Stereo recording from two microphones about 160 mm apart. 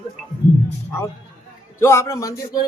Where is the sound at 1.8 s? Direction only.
15° left (ahead or behind).